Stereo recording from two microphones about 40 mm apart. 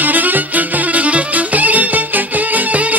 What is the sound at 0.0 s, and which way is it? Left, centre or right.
Music, right.